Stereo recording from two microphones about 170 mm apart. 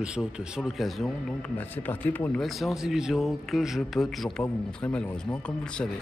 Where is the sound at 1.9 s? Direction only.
10° left (ahead or behind).